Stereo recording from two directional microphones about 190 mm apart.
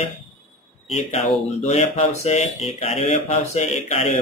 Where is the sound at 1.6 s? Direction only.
35° left (ahead or behind).